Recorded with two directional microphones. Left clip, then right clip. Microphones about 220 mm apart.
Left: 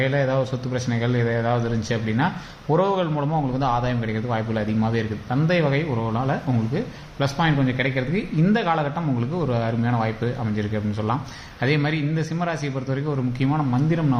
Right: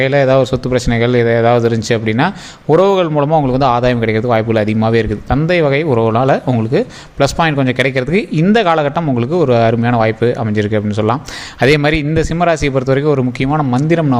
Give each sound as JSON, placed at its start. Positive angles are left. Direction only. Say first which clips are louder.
{"t": 0.0, "sound": "speech", "louder": "right 11 dB", "side_deg": -45}